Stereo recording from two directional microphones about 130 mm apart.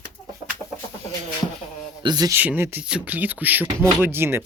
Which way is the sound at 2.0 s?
30° right (ahead or behind).